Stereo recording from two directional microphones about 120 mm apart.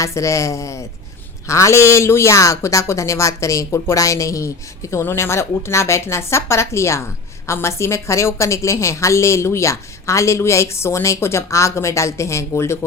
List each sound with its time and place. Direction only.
0.0 s speech: 25° left (ahead or behind)